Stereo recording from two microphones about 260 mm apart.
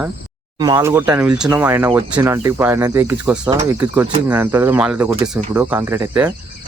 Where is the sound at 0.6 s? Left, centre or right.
Centre.